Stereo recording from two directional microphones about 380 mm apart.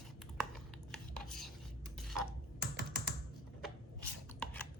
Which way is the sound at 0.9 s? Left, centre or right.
Centre.